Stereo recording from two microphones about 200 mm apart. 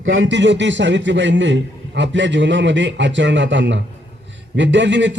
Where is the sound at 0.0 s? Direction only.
70° right (ahead or behind).